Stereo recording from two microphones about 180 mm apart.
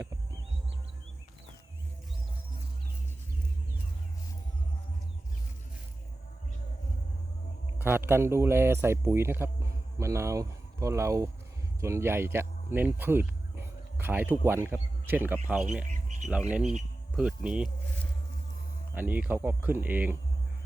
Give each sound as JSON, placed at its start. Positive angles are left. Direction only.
{"t": 7.8, "sound": "a man's voice", "side_deg": -10}
{"t": 18.9, "sound": "a man's voice", "side_deg": -10}